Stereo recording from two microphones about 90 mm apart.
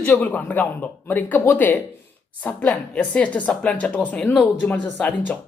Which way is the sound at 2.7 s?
5° left (ahead or behind).